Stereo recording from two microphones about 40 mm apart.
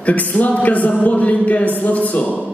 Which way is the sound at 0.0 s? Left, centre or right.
Left.